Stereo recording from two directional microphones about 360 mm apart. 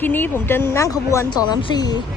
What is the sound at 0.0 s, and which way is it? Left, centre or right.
Speech, centre.